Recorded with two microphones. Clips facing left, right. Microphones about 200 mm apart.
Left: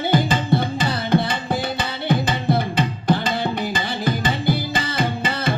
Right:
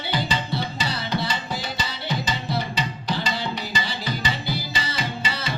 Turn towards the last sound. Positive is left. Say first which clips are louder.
# left 7 dB
turn(degrees=55)  # may be behind; listen again after turning